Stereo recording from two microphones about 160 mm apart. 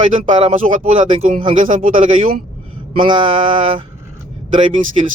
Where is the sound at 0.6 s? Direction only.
45° right (ahead or behind).